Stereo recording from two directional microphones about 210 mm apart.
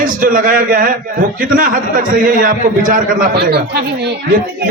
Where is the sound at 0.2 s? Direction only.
40° right (ahead or behind).